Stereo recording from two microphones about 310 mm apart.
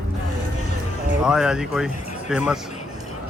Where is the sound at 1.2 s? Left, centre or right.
Centre.